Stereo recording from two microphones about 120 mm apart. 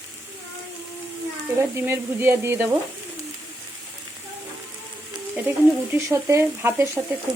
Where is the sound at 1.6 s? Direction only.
20° right (ahead or behind).